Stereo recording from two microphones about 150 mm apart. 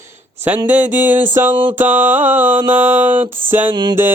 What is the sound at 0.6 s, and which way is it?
Mantra, 10° right (ahead or behind).